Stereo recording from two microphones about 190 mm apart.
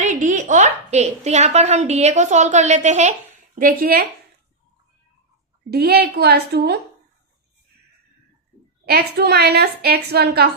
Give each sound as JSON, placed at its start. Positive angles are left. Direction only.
{"t": 0.0, "sound": "a woman's voice", "side_deg": -40}
{"t": 5.7, "sound": "a woman's voice", "side_deg": -55}
{"t": 8.9, "sound": "a woman's voice", "side_deg": -55}